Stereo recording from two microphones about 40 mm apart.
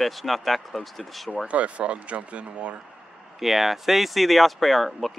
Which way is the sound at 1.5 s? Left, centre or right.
Right.